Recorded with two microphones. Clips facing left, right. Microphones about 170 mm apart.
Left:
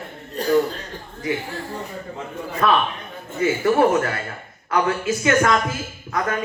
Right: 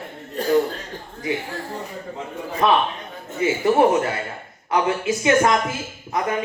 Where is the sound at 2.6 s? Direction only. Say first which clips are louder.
Right 1 dB; 20° right (ahead or behind).